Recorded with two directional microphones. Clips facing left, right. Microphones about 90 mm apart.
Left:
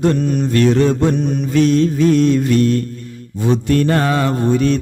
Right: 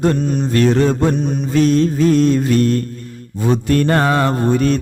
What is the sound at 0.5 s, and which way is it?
Mantra, 40° right (ahead or behind).